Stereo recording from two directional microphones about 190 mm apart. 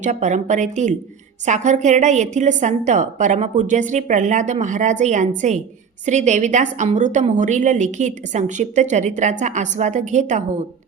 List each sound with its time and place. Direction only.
0.0 s a woman's voice: 40° right (ahead or behind)